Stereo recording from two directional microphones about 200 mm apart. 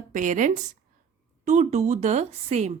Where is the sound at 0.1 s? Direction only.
40° right (ahead or behind).